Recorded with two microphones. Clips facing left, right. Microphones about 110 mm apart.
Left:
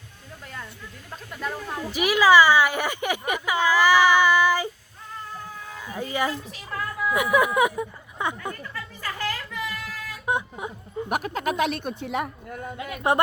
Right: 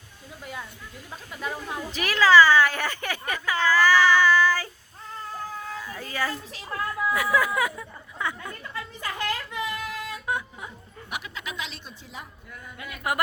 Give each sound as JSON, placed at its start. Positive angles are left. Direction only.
{"t": 1.1, "sound": "speech", "side_deg": -5}
{"t": 1.9, "sound": "speech", "side_deg": 10}
{"t": 5.8, "sound": "speech", "side_deg": 20}
{"t": 8.7, "sound": "a sound", "side_deg": -20}
{"t": 10.2, "sound": "speech", "side_deg": 20}
{"t": 11.1, "sound": "speech", "side_deg": 45}
{"t": 12.7, "sound": "speech", "side_deg": 25}